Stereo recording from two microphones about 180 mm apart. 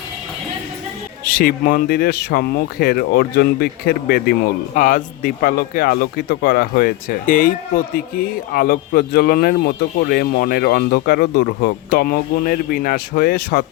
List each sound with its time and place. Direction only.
1.2 s speech: 50° left (ahead or behind)